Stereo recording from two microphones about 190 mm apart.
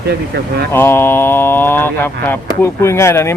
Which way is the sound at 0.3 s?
60° right (ahead or behind).